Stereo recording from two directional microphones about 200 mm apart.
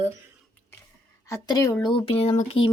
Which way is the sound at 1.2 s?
15° left (ahead or behind).